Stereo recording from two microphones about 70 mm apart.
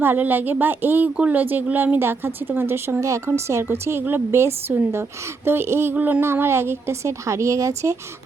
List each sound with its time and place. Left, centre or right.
0.0 s a woman's voice: right
1.1 s speech: centre
1.4 s a woman's voice: right